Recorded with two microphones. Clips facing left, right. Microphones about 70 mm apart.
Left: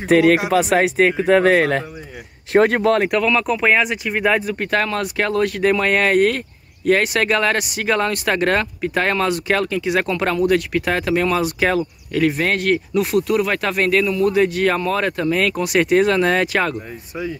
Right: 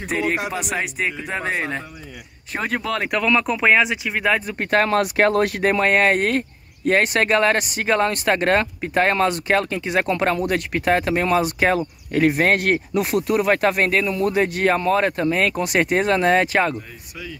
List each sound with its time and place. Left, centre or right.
0.1 s speech: left
1.3 s speech: left
2.5 s speech: left
3.2 s speech: right
3.4 s speech: centre
4.6 s speech: right
5.6 s speech: right
7.5 s speech: right
7.8 s speech: centre
12.9 s speech: centre
13.7 s speech: right
15.5 s speech: centre
16.1 s speech: centre